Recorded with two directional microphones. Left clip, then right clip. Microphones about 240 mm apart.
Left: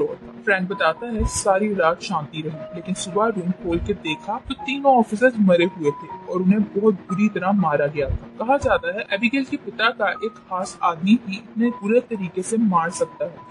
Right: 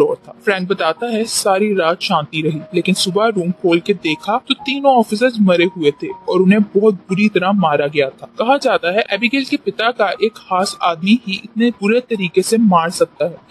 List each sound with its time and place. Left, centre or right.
0.0 s speech: right